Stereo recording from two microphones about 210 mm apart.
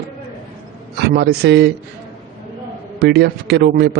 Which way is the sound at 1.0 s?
50° right (ahead or behind).